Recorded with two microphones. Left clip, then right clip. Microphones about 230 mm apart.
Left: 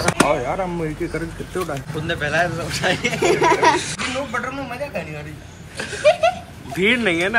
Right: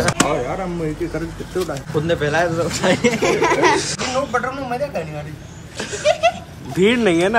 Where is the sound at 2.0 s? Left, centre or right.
Right.